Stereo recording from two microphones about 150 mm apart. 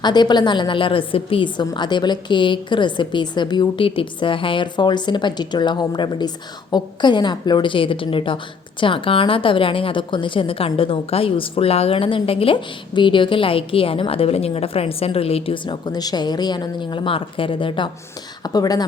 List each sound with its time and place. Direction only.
0.0 s a woman's voice: 30° left (ahead or behind)